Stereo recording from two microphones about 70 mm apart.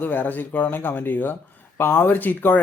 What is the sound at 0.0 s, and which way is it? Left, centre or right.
Speech, left.